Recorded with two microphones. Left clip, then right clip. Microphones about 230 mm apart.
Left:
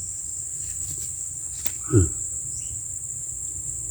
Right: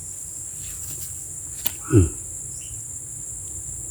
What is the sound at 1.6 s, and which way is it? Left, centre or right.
Cricket, centre.